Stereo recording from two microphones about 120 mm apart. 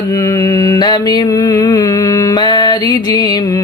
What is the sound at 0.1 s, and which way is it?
Mantra, 30° left (ahead or behind).